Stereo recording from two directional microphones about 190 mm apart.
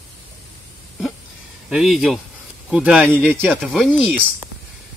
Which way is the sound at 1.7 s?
5° right (ahead or behind).